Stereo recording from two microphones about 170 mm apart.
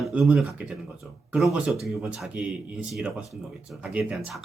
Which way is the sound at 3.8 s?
5° right (ahead or behind).